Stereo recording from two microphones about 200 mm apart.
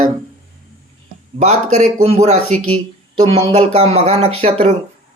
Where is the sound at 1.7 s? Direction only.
35° right (ahead or behind).